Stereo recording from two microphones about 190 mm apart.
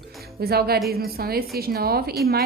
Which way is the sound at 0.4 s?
55° right (ahead or behind).